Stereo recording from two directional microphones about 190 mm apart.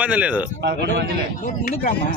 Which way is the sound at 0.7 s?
60° right (ahead or behind).